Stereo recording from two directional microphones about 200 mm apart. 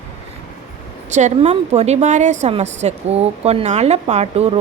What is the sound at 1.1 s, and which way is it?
A woman's voice, 35° right (ahead or behind).